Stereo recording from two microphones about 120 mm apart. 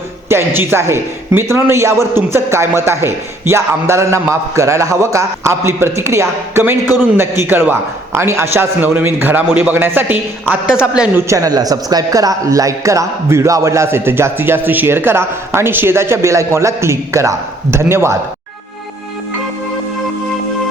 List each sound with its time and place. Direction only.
0.3 s a man's voice: 20° right (ahead or behind)
11.2 s a man's voice: 25° right (ahead or behind)